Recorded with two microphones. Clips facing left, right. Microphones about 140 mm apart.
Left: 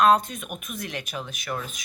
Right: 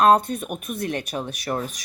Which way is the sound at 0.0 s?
35° right (ahead or behind).